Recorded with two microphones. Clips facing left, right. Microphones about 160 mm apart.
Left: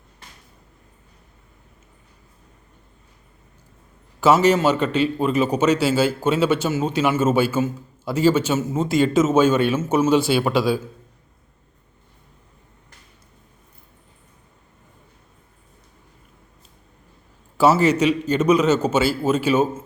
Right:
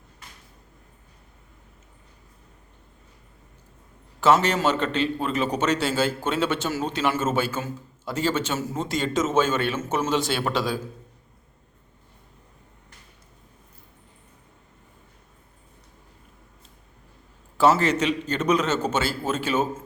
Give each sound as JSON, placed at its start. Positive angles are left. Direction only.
{"t": 4.2, "sound": "a man's voice", "side_deg": 10}
{"t": 17.6, "sound": "a man's voice", "side_deg": 10}